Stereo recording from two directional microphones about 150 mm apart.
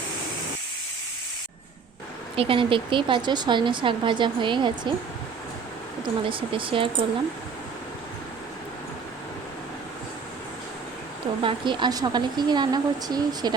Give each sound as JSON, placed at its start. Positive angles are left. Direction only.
{"t": 2.3, "sound": "speech", "side_deg": -35}
{"t": 6.0, "sound": "speech", "side_deg": -35}
{"t": 11.4, "sound": "a woman's voice", "side_deg": -30}